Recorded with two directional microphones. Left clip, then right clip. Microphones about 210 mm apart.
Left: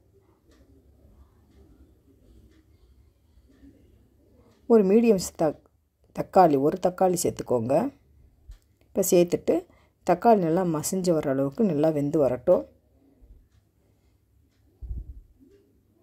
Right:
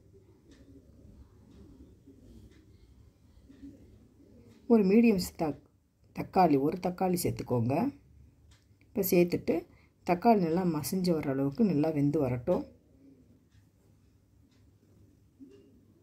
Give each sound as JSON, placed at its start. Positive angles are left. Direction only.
{"t": 4.6, "sound": "a woman's voice", "side_deg": 40}
{"t": 8.9, "sound": "a woman's voice", "side_deg": 40}